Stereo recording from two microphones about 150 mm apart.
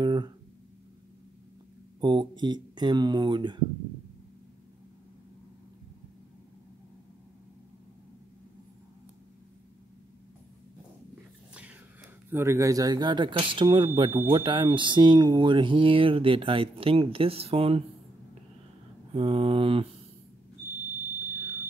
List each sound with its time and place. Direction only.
0.0 s a sound: 30° right (ahead or behind)
2.0 s speech: 30° right (ahead or behind)
12.3 s speech: 15° right (ahead or behind); by 17.8 s 40° right (ahead or behind)
19.1 s speech: 40° right (ahead or behind)